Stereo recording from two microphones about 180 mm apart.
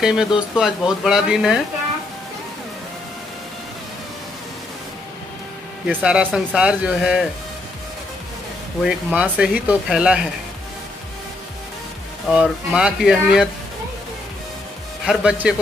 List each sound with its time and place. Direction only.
0.0 s speech: 5° right (ahead or behind)
5.9 s speech: 5° right (ahead or behind)
8.8 s speech: 5° right (ahead or behind)
12.3 s speech: 5° right (ahead or behind)
15.0 s speech: 5° right (ahead or behind)